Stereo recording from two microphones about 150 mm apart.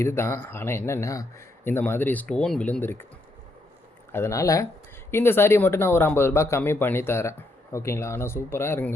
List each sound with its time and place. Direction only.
0.0 s speech: 15° left (ahead or behind)
4.1 s speech: 20° left (ahead or behind)